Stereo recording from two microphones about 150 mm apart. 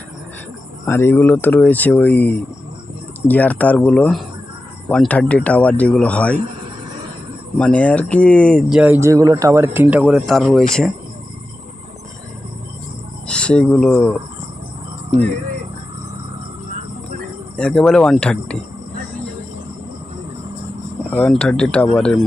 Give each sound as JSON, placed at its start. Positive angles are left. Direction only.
{"t": 0.9, "sound": "speech", "side_deg": 15}
{"t": 7.6, "sound": "speech", "side_deg": 10}
{"t": 8.8, "sound": "speech", "side_deg": -15}
{"t": 10.0, "sound": "speech", "side_deg": 0}
{"t": 13.2, "sound": "speech", "side_deg": 5}
{"t": 17.6, "sound": "speech", "side_deg": 5}
{"t": 21.1, "sound": "speech", "side_deg": 5}